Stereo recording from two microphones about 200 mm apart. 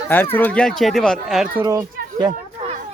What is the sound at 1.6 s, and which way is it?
Speech, 20° right (ahead or behind).